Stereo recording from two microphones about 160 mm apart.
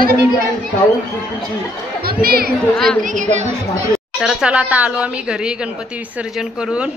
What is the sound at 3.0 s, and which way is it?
Speech, 55° right (ahead or behind).